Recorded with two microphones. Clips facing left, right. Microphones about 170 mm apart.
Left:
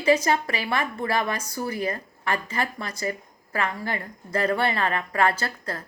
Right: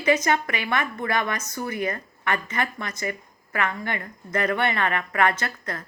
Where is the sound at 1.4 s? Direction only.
10° left (ahead or behind).